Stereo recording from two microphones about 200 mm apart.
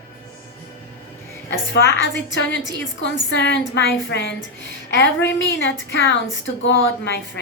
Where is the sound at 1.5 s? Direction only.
70° left (ahead or behind).